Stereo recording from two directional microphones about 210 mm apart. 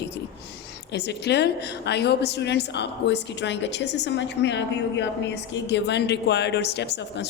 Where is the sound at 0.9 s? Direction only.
55° left (ahead or behind).